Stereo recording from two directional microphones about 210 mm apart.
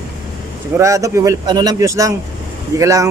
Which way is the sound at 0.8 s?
15° right (ahead or behind).